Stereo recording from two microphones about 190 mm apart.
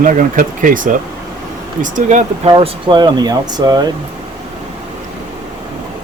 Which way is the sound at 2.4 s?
25° right (ahead or behind).